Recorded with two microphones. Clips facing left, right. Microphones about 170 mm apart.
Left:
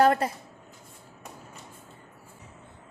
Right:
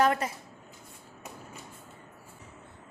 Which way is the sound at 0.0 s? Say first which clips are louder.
Left 4 dB; 35° left (ahead or behind).